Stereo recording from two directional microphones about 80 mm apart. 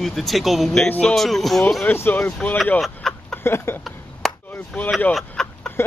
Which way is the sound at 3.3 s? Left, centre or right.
Left.